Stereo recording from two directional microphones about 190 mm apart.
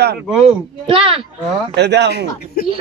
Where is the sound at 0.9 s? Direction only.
30° right (ahead or behind).